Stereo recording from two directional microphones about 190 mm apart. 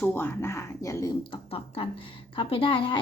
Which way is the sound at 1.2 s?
30° left (ahead or behind).